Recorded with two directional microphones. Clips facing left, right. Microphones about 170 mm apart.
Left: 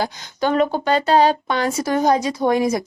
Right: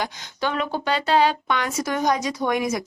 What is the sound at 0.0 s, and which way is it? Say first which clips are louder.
Speech: left 5 dB; 40° left (ahead or behind).